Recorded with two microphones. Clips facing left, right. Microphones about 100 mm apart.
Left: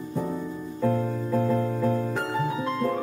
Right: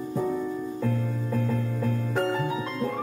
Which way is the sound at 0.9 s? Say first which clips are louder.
Left 7 dB; 35° left (ahead or behind).